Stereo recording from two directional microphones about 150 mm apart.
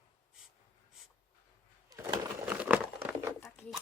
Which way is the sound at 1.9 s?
15° right (ahead or behind).